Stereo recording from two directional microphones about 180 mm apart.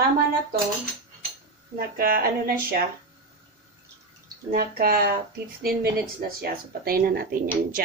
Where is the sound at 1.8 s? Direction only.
55° right (ahead or behind).